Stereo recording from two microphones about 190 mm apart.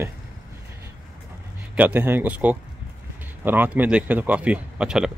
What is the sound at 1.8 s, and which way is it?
A man's voice, 10° right (ahead or behind).